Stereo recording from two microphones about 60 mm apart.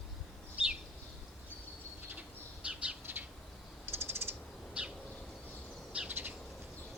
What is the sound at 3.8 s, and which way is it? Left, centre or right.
Mechanisms, right.